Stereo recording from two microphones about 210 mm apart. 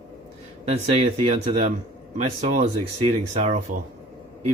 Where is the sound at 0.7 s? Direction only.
30° right (ahead or behind).